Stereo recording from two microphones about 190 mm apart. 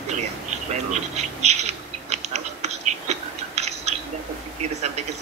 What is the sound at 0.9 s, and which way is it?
Bird, 35° right (ahead or behind).